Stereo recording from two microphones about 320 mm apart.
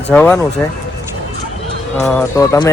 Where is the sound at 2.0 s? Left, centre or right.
Centre.